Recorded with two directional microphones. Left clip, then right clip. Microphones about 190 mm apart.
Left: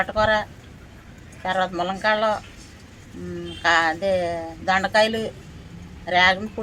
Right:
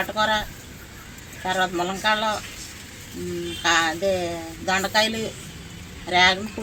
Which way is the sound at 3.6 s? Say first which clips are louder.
Left 2 dB; 15° left (ahead or behind).